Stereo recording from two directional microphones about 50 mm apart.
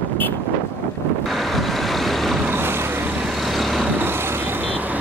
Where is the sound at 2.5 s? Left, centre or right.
Right.